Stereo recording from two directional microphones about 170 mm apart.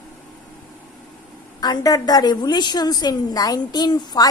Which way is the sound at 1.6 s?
20° left (ahead or behind).